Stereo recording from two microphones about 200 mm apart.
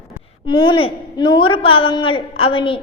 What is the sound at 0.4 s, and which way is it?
A woman's voice, 25° left (ahead or behind).